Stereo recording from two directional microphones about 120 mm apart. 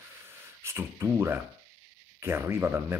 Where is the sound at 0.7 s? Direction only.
20° right (ahead or behind).